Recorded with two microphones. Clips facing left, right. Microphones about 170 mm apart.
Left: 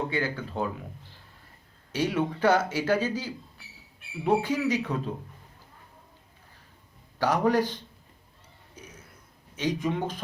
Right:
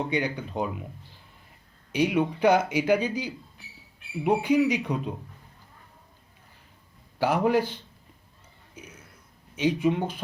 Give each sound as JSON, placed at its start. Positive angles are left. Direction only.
{"t": 0.1, "sound": "speech", "side_deg": -15}
{"t": 1.9, "sound": "speech", "side_deg": -15}
{"t": 7.2, "sound": "speech", "side_deg": -10}
{"t": 9.6, "sound": "speech", "side_deg": -10}